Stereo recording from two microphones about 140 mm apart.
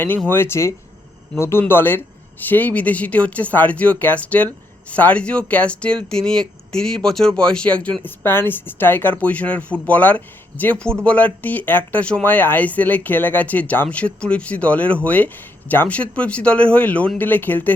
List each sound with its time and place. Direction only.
0.3 s speech: 15° left (ahead or behind)